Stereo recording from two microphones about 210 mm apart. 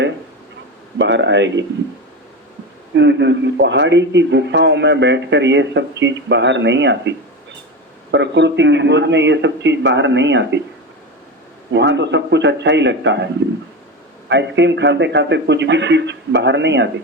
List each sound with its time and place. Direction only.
0.9 s a man's voice: 60° right (ahead or behind)
2.9 s a man's voice: 60° right (ahead or behind)
8.1 s a man's voice: 55° right (ahead or behind)
11.7 s a man's voice: 55° right (ahead or behind)